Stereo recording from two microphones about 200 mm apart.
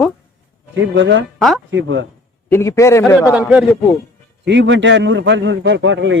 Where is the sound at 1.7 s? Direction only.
70° right (ahead or behind).